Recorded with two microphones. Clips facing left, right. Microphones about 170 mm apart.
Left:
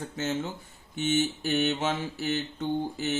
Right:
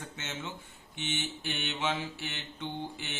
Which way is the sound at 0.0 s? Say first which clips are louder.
Left 10 dB; 35° left (ahead or behind).